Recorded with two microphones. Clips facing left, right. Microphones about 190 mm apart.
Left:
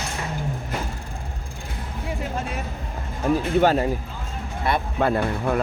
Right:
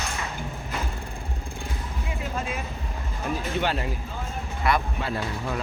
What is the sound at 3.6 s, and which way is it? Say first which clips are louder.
Speech: left 9 dB; 45° left (ahead or behind).